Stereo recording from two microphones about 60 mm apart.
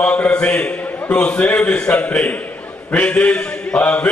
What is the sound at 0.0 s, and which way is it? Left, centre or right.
A man's voice, left.